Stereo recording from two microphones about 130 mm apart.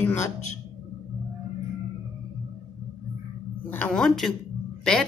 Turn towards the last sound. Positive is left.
turn(degrees=5)  # may be behind; listen again after turning